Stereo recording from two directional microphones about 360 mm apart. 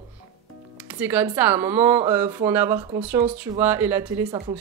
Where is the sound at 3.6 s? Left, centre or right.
Centre.